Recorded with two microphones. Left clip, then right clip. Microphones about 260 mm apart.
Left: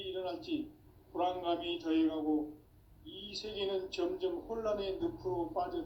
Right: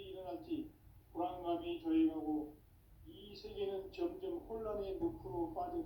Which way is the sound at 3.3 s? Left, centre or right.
Left.